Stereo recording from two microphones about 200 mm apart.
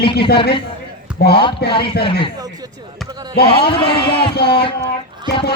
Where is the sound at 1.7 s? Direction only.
25° left (ahead or behind).